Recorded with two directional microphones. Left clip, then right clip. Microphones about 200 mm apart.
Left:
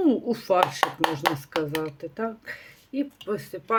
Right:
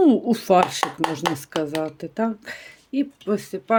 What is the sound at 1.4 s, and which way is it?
Speech, 45° right (ahead or behind).